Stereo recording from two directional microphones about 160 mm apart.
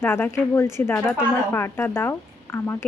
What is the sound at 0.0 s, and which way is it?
A woman's voice, 10° left (ahead or behind).